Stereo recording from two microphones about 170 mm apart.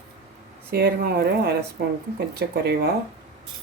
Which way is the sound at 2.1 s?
85° right.